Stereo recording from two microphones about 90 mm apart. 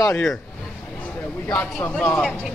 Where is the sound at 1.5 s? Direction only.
15° left (ahead or behind).